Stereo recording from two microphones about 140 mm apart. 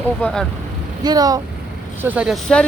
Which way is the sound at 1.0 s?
25° right (ahead or behind).